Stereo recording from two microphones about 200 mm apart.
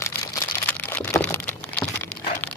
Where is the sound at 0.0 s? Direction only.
10° left (ahead or behind).